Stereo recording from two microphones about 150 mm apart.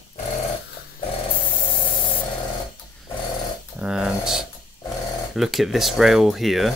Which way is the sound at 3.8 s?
5° right (ahead or behind).